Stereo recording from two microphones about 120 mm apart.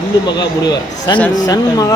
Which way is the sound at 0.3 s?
35° left (ahead or behind).